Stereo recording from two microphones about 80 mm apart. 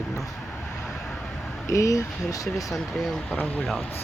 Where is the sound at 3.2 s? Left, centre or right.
Centre.